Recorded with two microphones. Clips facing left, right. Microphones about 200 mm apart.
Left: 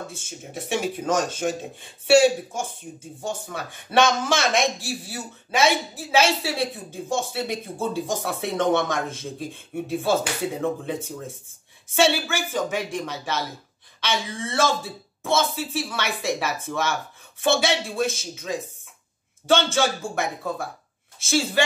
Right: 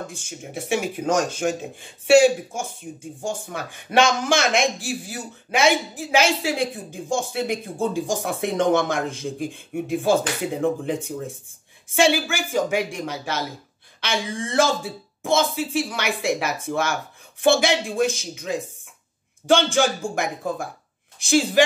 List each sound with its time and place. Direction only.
0.5 s speech: 10° right (ahead or behind)